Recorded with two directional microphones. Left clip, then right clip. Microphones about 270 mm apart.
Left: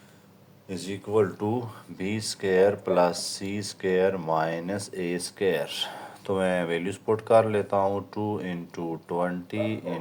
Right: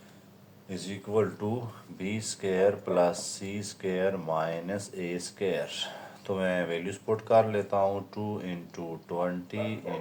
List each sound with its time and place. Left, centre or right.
0.7 s speech: left